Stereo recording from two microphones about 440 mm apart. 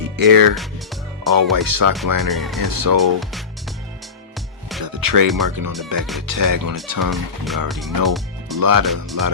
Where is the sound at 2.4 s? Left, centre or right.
Centre.